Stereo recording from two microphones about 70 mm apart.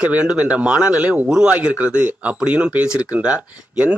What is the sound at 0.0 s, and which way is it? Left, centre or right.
Speech, centre.